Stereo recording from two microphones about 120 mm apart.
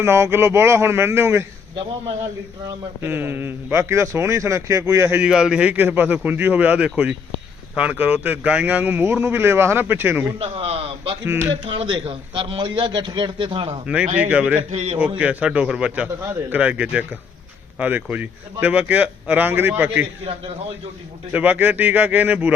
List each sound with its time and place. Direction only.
0.0 s a man's voice: 20° right (ahead or behind)
3.0 s a man's voice: 15° right (ahead or behind)
5.2 s a man's voice: 5° right (ahead or behind)
10.3 s a man's voice: 55° right (ahead or behind)
13.8 s a man's voice: 10° right (ahead or behind)
14.7 s a man's voice: 60° right (ahead or behind)
15.2 s a man's voice: 10° right (ahead or behind)
16.2 s a man's voice: 20° right (ahead or behind)
21.3 s a man's voice: 15° right (ahead or behind)